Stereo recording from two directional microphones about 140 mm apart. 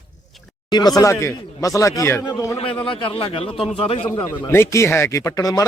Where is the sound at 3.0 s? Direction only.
40° left (ahead or behind).